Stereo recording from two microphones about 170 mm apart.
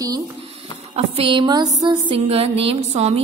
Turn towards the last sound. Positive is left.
turn(degrees=-40)  # may be behind; listen again after turning